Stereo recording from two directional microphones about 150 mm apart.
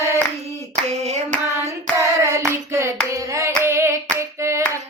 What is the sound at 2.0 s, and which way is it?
Hands, 20° right (ahead or behind).